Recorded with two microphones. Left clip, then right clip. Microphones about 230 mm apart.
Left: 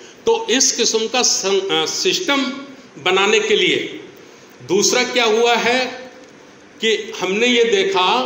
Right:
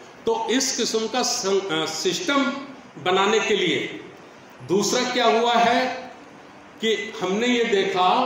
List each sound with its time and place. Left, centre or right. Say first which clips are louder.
0.2 s a man's voice: left 6 dB; centre